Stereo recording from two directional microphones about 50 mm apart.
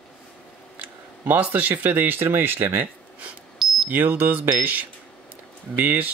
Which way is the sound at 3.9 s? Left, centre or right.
Right.